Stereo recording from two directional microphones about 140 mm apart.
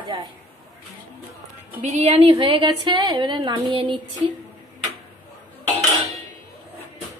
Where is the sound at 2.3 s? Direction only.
35° right (ahead or behind).